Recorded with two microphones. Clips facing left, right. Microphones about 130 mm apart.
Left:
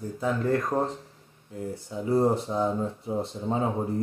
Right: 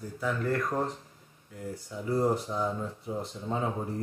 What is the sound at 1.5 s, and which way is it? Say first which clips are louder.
Speech: left 5 dB; 25° left (ahead or behind).